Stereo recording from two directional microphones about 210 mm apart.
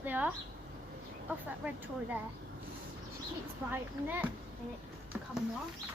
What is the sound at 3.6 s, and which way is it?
Speech, 10° right (ahead or behind).